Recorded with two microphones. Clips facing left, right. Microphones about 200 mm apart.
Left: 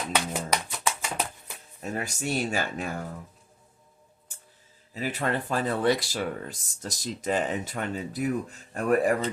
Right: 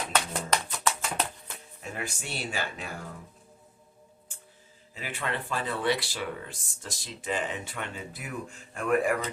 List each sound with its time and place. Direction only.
0.1 s a sound: 10° left (ahead or behind)
1.8 s speech: 40° left (ahead or behind)
4.9 s speech: 40° left (ahead or behind)